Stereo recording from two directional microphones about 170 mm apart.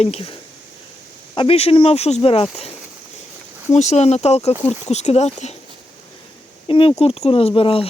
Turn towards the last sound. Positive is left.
turn(degrees=30)  # may be behind; listen again after turning